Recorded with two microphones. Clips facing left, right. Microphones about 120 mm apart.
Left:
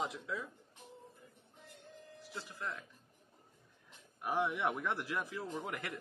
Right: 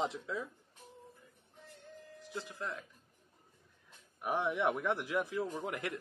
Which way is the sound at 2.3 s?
20° right (ahead or behind).